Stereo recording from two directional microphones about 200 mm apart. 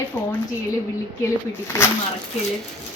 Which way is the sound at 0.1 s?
10° left (ahead or behind).